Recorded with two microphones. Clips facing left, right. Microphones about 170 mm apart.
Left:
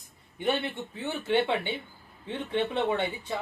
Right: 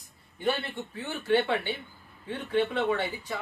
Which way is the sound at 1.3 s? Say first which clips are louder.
Right 1 dB; 20° left (ahead or behind).